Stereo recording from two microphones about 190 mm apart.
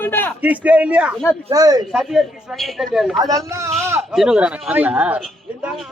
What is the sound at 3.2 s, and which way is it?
Speech, 15° right (ahead or behind).